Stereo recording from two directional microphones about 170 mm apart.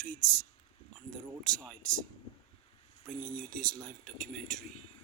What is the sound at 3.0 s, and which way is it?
Speech, centre (ahead or behind).